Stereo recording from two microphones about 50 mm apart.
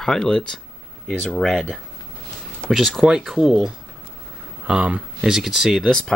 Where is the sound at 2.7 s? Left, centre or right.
Centre.